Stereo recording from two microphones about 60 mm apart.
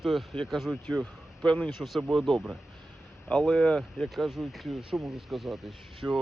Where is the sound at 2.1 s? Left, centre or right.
Centre.